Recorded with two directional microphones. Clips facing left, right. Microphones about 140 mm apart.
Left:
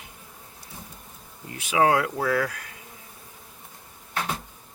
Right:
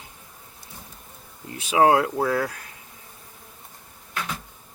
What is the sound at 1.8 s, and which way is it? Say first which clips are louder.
Speech: right 3 dB; 30° right (ahead or behind).